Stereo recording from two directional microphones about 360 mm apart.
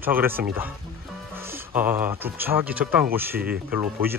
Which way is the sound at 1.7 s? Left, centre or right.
Centre.